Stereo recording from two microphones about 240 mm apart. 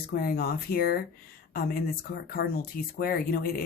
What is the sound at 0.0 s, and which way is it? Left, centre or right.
Speech, left.